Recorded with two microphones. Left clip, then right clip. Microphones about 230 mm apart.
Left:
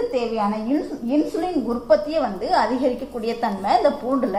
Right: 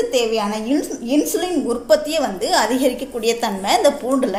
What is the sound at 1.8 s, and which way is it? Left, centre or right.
A woman's voice, right.